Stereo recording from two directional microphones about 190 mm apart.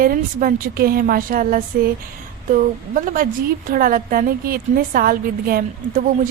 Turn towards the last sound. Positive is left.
turn(degrees=-50)  # may be behind; listen again after turning